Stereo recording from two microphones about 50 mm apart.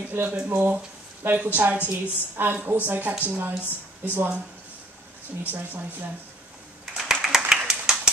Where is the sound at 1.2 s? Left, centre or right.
Right.